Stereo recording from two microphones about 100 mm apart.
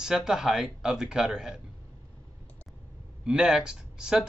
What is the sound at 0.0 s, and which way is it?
Speech, 5° right (ahead or behind).